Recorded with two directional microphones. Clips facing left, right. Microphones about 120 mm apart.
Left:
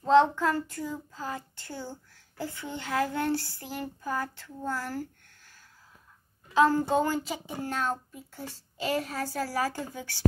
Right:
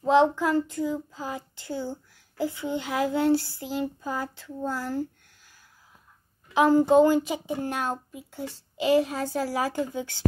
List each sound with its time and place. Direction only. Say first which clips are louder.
0.0 s speech: right 1 dB; 15° right (ahead or behind)
6.5 s speech: right 5 dB; 15° right (ahead or behind)